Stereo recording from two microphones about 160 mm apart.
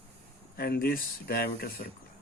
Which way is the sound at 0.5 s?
70° left (ahead or behind).